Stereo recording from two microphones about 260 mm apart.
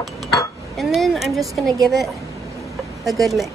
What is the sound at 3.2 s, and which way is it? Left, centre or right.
Speech, centre.